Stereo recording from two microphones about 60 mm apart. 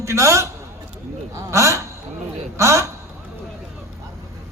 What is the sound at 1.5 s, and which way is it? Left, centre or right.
A man's voice, right.